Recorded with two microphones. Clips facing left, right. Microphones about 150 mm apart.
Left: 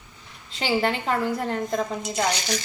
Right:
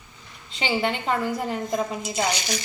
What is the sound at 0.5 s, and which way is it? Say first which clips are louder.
A woman's voice: left 1 dB; centre (ahead or behind).